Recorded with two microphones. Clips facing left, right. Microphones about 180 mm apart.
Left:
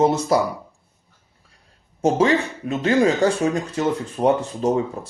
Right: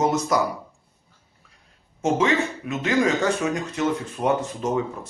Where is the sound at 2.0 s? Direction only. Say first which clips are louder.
Left 3 dB; 35° left (ahead or behind).